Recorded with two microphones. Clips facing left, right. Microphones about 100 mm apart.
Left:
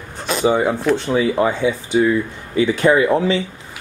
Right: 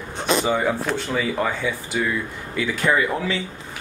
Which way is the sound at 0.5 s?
15° left (ahead or behind).